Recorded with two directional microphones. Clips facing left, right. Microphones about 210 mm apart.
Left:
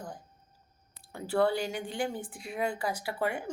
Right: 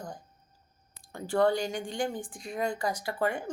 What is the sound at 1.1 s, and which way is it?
A woman's voice, 5° left (ahead or behind).